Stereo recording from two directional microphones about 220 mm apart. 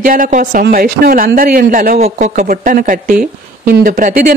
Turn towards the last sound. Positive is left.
turn(degrees=-40)  # may be behind; listen again after turning